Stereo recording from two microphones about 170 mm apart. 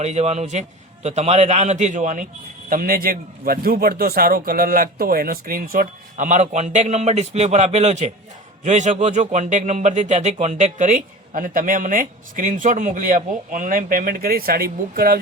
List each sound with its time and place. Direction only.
0.0 s a man's voice: 40° right (ahead or behind); by 15.2 s 60° right (ahead or behind)